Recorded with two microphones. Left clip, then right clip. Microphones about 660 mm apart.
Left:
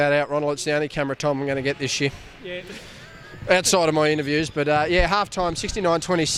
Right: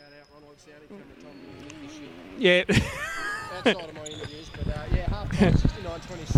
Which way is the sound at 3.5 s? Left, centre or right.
Left.